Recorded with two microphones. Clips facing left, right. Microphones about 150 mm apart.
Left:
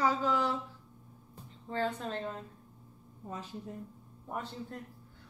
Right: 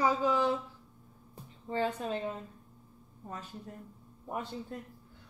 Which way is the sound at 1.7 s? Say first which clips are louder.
Right 2 dB; 10° right (ahead or behind).